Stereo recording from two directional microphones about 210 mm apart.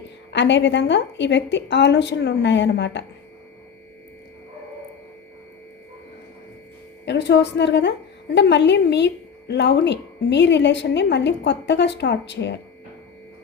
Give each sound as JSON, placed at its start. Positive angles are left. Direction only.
{"t": 0.3, "sound": "a woman's voice", "side_deg": 60}
{"t": 7.0, "sound": "a woman's voice", "side_deg": 55}